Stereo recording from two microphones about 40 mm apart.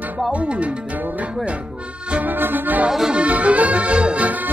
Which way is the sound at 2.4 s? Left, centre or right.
Right.